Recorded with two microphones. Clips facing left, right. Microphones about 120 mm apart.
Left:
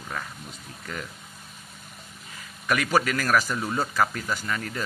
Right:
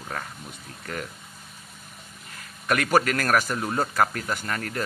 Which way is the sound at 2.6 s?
50° right (ahead or behind).